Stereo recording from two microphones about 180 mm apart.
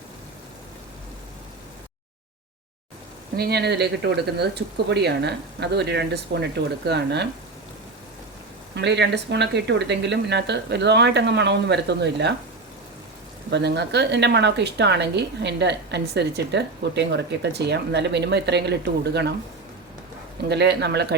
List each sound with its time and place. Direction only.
3.3 s speech: 60° right (ahead or behind)
8.7 s speech: 70° right (ahead or behind)
13.5 s speech: 70° right (ahead or behind)
20.5 s speech: 70° right (ahead or behind)